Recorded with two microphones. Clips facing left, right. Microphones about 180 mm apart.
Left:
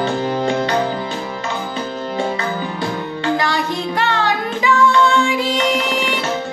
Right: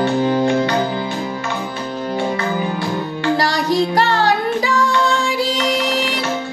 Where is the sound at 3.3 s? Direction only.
35° right (ahead or behind).